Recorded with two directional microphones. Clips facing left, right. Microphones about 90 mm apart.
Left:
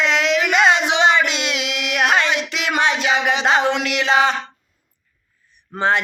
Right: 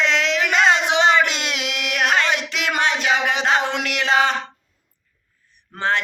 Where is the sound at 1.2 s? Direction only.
45° right (ahead or behind).